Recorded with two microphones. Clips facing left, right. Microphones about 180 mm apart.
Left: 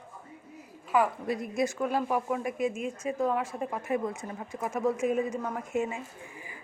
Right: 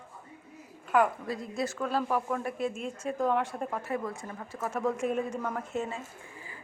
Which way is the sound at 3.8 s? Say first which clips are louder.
Left 3 dB; 20° left (ahead or behind).